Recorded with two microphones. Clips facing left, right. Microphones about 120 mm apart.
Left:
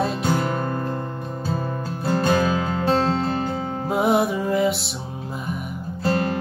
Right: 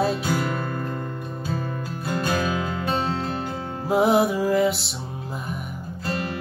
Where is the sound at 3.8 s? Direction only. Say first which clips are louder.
Right 1 dB; centre (ahead or behind).